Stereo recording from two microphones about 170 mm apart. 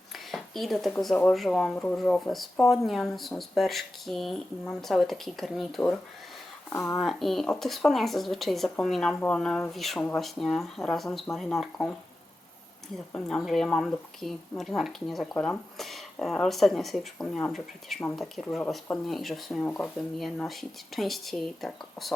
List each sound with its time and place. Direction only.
0.1 s speech: centre (ahead or behind)
6.7 s speech: 15° left (ahead or behind)
7.0 s speech: centre (ahead or behind)
13.1 s speech: 5° left (ahead or behind)